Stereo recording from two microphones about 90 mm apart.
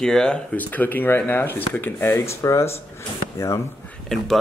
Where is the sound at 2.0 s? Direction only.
40° left (ahead or behind).